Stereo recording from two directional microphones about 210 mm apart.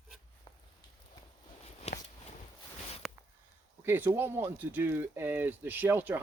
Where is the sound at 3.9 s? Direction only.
10° right (ahead or behind).